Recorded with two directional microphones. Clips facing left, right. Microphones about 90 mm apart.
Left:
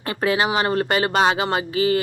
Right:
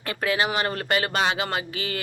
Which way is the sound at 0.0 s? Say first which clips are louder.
Left 4 dB; 30° left (ahead or behind).